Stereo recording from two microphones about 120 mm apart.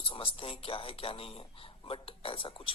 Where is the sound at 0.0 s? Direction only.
50° left (ahead or behind).